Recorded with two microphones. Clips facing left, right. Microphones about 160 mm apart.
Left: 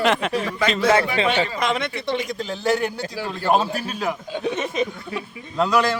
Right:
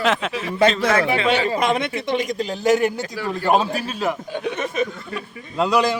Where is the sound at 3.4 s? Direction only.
Centre (ahead or behind).